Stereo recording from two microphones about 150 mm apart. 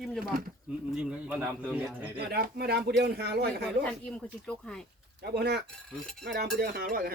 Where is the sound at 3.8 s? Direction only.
5° left (ahead or behind).